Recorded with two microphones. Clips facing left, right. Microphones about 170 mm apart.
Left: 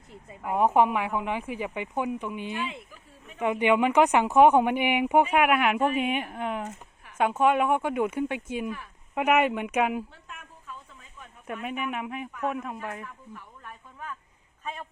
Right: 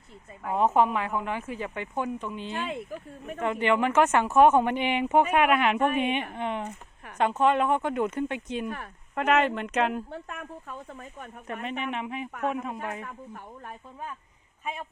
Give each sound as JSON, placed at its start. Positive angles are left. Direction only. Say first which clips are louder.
{"t": 0.1, "sound": "speech", "louder": "left 1 dB", "side_deg": 10}
{"t": 2.6, "sound": "speech", "louder": "right 2 dB", "side_deg": -50}
{"t": 3.3, "sound": "speech", "louder": "left 2 dB", "side_deg": 15}
{"t": 10.1, "sound": "speech", "louder": "right 10 dB", "side_deg": -60}
{"t": 11.6, "sound": "speech", "louder": "even", "side_deg": 5}
{"t": 13.1, "sound": "speech", "louder": "right 4 dB", "side_deg": -50}
{"t": 14.6, "sound": "speech", "louder": "right 2 dB", "side_deg": -10}